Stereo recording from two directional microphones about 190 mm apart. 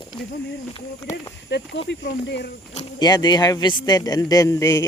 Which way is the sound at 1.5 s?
65° left (ahead or behind).